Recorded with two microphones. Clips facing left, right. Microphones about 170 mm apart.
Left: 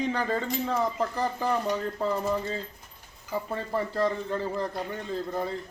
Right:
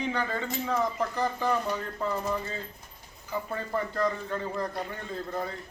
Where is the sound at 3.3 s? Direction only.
30° left (ahead or behind).